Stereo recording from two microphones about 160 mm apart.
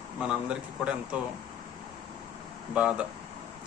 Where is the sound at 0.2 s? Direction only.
5° right (ahead or behind).